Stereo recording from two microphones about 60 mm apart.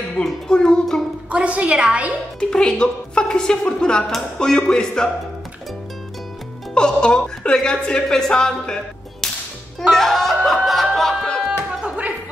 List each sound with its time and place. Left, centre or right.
0.2 s a woman's voice: centre
1.3 s a woman's voice: right
2.5 s a woman's voice: centre
6.7 s a woman's voice: centre
9.8 s music: centre